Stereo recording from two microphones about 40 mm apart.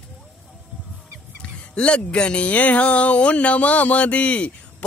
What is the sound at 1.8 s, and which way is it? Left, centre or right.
Speech, left.